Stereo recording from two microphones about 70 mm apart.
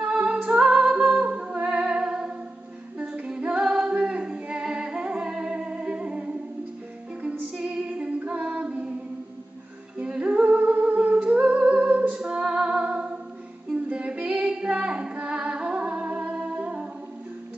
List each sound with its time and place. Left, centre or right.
0.0 s music: centre
3.0 s female singing: centre
3.9 s music: centre
7.5 s music: centre
9.9 s music: centre